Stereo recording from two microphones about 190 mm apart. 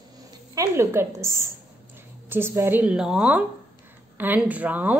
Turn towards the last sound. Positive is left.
turn(degrees=-10)  # may be behind; listen again after turning